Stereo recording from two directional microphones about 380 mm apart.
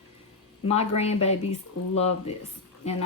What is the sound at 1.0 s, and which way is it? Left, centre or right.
Speech, centre.